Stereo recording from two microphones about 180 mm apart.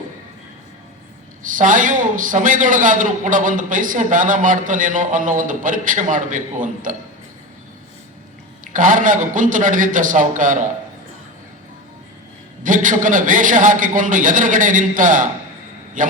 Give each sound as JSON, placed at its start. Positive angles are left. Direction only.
{"t": 1.5, "sound": "a man's voice", "side_deg": -45}
{"t": 8.6, "sound": "a man's voice", "side_deg": -45}
{"t": 12.6, "sound": "a man's voice", "side_deg": -45}